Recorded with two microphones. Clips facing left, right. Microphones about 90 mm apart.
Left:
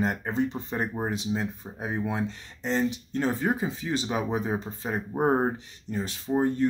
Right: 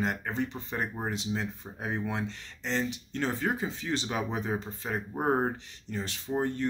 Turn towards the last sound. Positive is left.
turn(degrees=15)  # may be behind; listen again after turning